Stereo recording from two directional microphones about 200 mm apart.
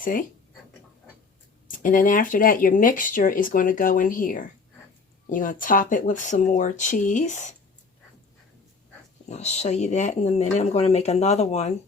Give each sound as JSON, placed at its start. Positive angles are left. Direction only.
{"t": 0.0, "sound": "speech", "side_deg": 45}
{"t": 1.6, "sound": "speech", "side_deg": 40}
{"t": 9.3, "sound": "speech", "side_deg": 35}